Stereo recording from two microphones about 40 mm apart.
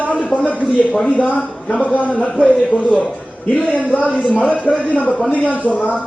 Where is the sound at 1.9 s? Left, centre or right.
Left.